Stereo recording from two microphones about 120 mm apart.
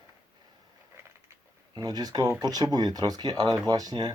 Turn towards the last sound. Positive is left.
turn(degrees=-35)  # may be behind; listen again after turning